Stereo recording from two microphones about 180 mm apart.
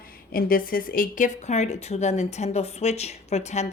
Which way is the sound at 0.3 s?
55° left (ahead or behind).